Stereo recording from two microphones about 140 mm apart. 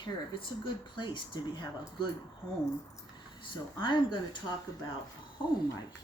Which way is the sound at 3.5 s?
35° left (ahead or behind).